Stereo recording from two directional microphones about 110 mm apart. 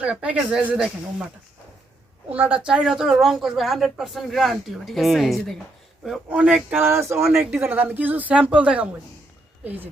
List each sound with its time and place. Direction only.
0.0 s speech: 10° right (ahead or behind)
2.6 s speech: 10° right (ahead or behind)
6.7 s speech: 25° right (ahead or behind)